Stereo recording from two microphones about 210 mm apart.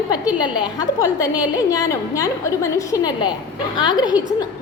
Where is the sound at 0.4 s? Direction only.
20° left (ahead or behind).